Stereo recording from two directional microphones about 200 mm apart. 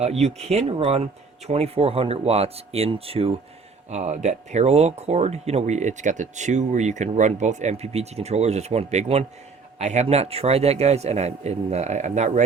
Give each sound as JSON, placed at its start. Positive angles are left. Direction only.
{"t": 0.0, "sound": "speech", "side_deg": -35}